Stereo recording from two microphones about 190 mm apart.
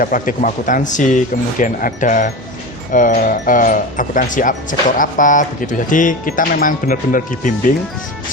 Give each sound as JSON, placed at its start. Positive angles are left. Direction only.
{"t": 0.0, "sound": "speech", "side_deg": 45}